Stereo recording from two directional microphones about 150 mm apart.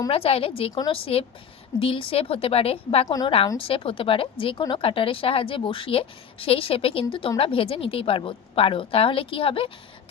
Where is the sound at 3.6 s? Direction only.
35° left (ahead or behind).